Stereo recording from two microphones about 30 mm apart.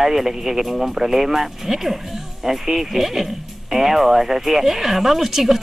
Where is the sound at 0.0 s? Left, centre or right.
Centre.